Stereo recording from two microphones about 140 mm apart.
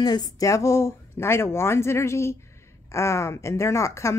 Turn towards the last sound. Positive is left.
turn(degrees=20)  # may be behind; listen again after turning